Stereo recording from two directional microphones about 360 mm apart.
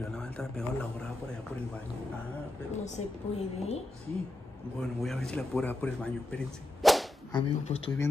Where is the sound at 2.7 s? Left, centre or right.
Centre.